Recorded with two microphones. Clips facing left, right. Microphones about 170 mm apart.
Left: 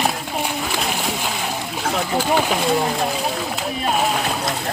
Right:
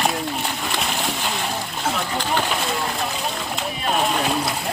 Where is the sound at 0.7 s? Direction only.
5° left (ahead or behind).